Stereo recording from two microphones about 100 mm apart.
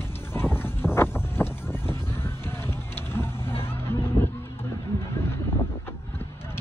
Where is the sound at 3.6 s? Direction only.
25° left (ahead or behind).